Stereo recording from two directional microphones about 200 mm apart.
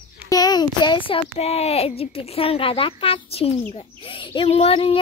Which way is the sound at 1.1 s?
30° left (ahead or behind).